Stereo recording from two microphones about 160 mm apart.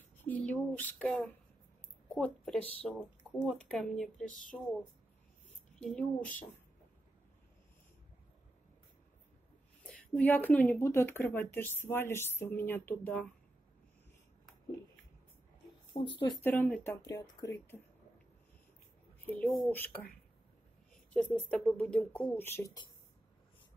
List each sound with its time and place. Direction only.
0.2 s speech: 10° left (ahead or behind)
4.3 s speech: 55° left (ahead or behind)
5.8 s speech: 5° left (ahead or behind)
9.8 s speech: 5° left (ahead or behind)
15.9 s speech: 30° left (ahead or behind)
16.4 s speech: 10° left (ahead or behind)
17.0 s speech: 25° left (ahead or behind)
19.2 s speech: 10° left (ahead or behind)
21.1 s speech: 5° left (ahead or behind)